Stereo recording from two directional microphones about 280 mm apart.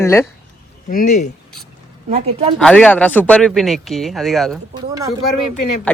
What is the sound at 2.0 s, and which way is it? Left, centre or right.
Speech, right.